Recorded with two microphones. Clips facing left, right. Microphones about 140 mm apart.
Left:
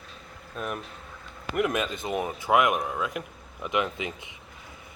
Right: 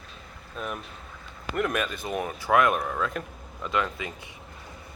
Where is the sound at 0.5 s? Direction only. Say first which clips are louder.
Left 1 dB; 5° left (ahead or behind).